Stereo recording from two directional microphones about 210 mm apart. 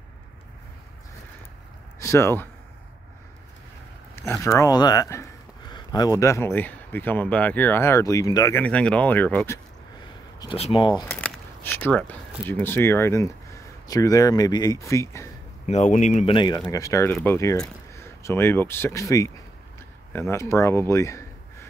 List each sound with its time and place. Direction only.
2.0 s speech: 15° left (ahead or behind)
4.1 s speech: 10° left (ahead or behind)
10.4 s speech: 25° left (ahead or behind)
11.1 s speech: 5° left (ahead or behind)
15.7 s speech: 35° left (ahead or behind); by 21.6 s 15° left (ahead or behind)